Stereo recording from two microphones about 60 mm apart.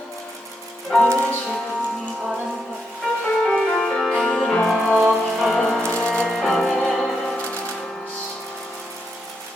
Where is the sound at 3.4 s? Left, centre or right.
Centre.